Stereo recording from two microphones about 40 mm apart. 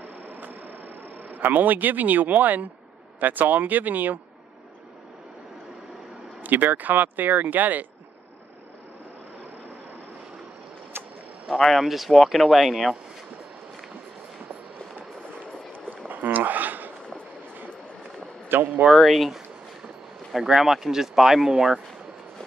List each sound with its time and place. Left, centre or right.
0.0 s a sound: right
3.2 s speech: right
6.4 s speech: right
11.4 s speech: centre
11.7 s speech: centre
16.1 s a sound: right
18.5 s speech: right
18.9 s speech: centre
20.3 s speech: centre